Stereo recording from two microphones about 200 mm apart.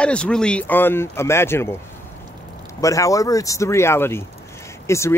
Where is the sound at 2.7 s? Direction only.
15° left (ahead or behind).